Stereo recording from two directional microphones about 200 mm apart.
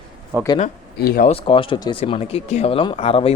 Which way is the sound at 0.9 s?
50° left (ahead or behind).